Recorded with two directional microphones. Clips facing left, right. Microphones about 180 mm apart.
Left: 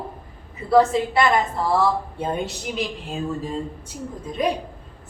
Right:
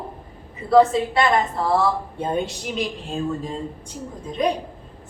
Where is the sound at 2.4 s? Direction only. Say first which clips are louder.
Right 1 dB; 5° left (ahead or behind).